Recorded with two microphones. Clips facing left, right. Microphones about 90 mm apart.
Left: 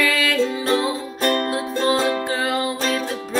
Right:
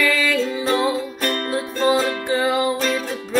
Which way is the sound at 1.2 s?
35° left (ahead or behind).